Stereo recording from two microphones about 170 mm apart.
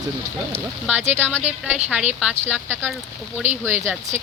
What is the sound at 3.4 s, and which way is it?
Speech, 45° right (ahead or behind).